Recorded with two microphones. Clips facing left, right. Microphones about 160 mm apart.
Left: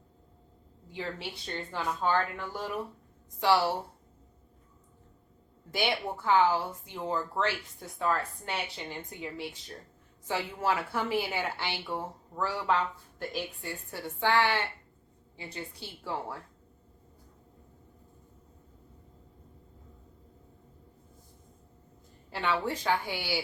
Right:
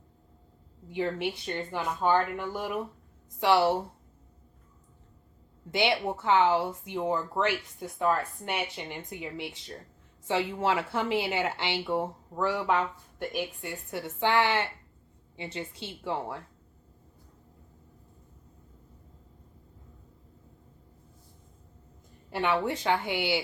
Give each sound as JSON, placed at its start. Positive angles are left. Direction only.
{"t": 0.9, "sound": "speech", "side_deg": -20}
{"t": 5.7, "sound": "speech", "side_deg": -20}
{"t": 22.3, "sound": "speech", "side_deg": -20}